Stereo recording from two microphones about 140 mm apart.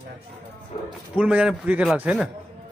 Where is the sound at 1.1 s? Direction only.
10° right (ahead or behind).